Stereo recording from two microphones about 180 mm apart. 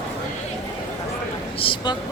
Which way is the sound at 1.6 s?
30° left (ahead or behind).